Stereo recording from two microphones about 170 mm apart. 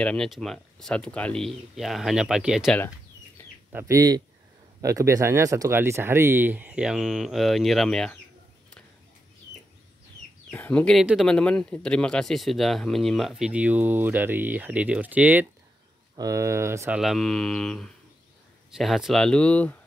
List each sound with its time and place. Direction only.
0.0 s speech: 5° left (ahead or behind)
3.7 s speech: 20° right (ahead or behind); by 8.2 s 5° left (ahead or behind)
10.5 s speech: 10° left (ahead or behind); by 17.0 s 15° right (ahead or behind)
17.0 s speech: centre (ahead or behind)